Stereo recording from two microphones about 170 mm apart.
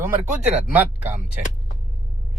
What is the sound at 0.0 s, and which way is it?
Speech, 10° right (ahead or behind).